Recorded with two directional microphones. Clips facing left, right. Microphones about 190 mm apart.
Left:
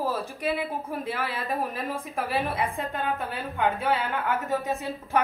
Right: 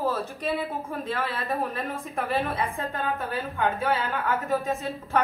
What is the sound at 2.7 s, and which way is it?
Speech, 15° left (ahead or behind).